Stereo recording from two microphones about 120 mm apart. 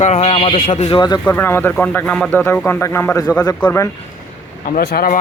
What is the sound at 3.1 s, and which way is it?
Speech, 30° left (ahead or behind).